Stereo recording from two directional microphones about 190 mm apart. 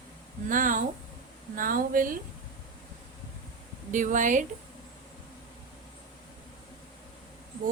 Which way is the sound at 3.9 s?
40° right (ahead or behind).